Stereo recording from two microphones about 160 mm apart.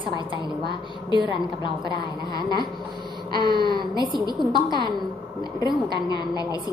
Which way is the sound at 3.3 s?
25° left (ahead or behind).